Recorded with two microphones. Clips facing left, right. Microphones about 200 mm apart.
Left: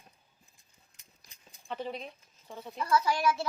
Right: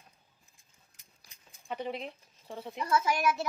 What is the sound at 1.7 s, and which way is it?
Speech, 15° right (ahead or behind).